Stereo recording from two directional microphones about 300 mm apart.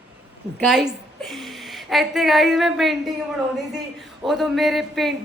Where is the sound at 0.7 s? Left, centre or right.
Centre.